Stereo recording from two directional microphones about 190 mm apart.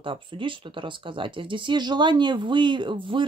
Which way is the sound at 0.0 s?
25° right (ahead or behind).